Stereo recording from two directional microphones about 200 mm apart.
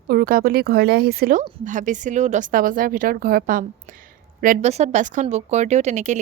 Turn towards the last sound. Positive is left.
turn(degrees=-35)  # may be behind; listen again after turning